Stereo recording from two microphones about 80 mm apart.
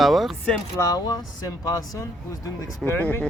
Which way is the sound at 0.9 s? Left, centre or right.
Left.